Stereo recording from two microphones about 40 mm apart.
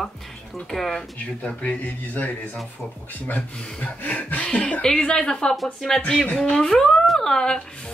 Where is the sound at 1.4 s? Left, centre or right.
Left.